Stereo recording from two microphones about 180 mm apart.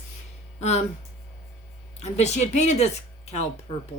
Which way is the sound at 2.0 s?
40° left (ahead or behind).